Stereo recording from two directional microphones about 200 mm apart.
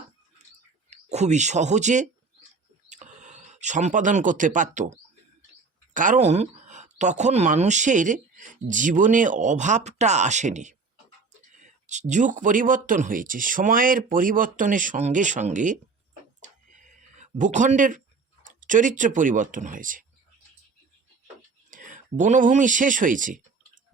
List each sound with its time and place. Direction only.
0.9 s speech: 35° right (ahead or behind)
16.4 s a sound: 40° right (ahead or behind)
18.6 s speech: 40° right (ahead or behind)
21.7 s speech: 40° right (ahead or behind)